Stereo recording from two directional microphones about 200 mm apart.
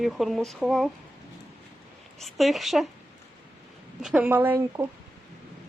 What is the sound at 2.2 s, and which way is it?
Speech, centre (ahead or behind).